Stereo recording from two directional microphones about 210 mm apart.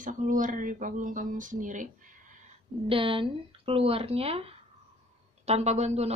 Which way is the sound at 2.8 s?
25° right (ahead or behind).